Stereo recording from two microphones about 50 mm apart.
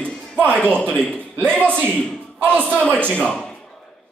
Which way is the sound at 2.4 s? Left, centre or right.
Right.